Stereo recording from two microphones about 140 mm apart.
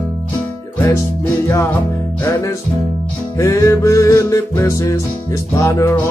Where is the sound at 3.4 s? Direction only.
20° left (ahead or behind).